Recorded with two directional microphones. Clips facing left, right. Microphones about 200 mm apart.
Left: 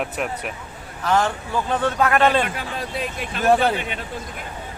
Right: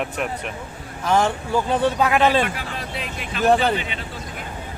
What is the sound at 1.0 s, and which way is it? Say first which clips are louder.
Speech: right 1 dB; 15° right (ahead or behind).